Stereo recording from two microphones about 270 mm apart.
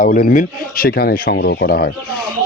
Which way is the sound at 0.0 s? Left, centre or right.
Left.